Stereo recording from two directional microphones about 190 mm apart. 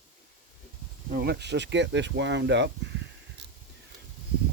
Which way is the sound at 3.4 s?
60° right (ahead or behind).